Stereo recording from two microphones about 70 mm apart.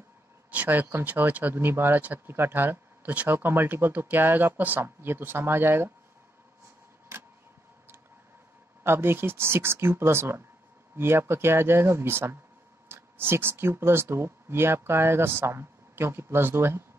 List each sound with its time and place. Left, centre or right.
0.5 s speech: right
8.8 s speech: right